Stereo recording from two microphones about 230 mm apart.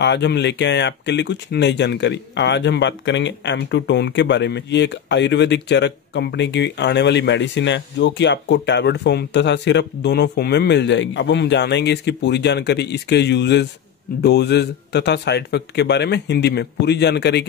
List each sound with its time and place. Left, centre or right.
0.0 s speech: left